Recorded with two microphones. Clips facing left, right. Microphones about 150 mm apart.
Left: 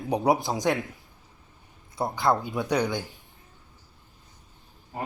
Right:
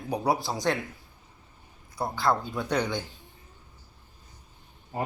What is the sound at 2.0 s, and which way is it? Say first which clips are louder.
Speech: left 2 dB; 25° left (ahead or behind).